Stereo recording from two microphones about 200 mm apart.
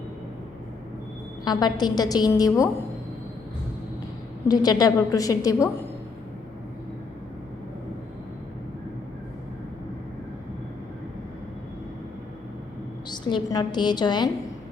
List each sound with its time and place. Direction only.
1.5 s a woman's voice: 20° left (ahead or behind)
4.4 s a woman's voice: 20° left (ahead or behind)
13.1 s a woman's voice: 20° left (ahead or behind)